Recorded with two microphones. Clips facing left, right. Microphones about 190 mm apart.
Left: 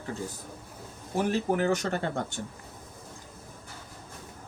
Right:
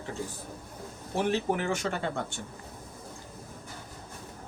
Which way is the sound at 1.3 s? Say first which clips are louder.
Left 3 dB; 40° left (ahead or behind).